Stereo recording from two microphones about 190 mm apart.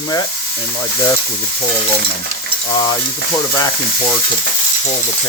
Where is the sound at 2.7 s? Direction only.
20° left (ahead or behind).